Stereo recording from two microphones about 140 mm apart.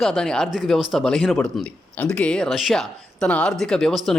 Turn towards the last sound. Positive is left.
turn(degrees=5)  # may be behind; listen again after turning